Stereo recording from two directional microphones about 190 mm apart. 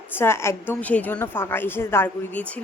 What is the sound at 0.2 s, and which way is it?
Speech, 10° left (ahead or behind).